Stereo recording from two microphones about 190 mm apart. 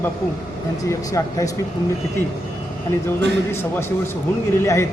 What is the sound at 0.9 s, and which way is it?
Speech, 15° left (ahead or behind).